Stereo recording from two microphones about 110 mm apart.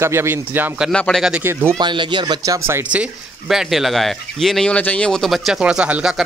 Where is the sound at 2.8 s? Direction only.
10° right (ahead or behind).